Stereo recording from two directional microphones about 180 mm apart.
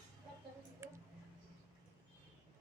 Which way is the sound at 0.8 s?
15° right (ahead or behind).